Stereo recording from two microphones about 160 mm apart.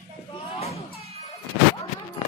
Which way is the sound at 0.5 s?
40° left (ahead or behind).